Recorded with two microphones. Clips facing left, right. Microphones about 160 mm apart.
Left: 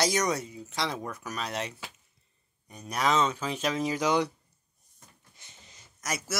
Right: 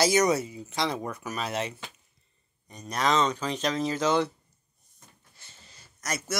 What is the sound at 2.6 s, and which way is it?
Speech, 10° left (ahead or behind).